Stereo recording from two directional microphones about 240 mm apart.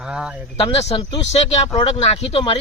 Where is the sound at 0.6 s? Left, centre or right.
Left.